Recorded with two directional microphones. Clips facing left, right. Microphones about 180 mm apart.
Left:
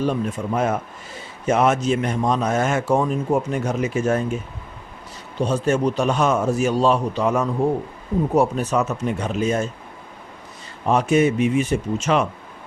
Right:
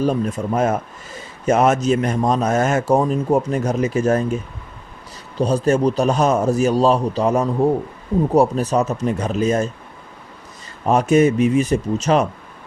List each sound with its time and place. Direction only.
0.0 s a man's voice: 40° right (ahead or behind)
5.4 s a man's voice: 35° right (ahead or behind)
10.8 s a man's voice: 40° right (ahead or behind)